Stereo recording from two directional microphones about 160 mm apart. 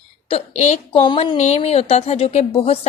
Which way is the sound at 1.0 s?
30° left (ahead or behind).